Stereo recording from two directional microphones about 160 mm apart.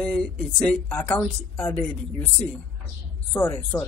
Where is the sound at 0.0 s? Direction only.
5° left (ahead or behind).